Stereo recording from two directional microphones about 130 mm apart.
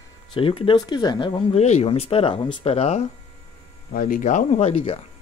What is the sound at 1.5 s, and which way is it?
Speech, 55° left (ahead or behind).